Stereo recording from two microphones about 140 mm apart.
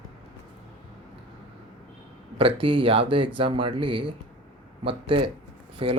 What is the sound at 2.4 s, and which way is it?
Speech, 40° right (ahead or behind).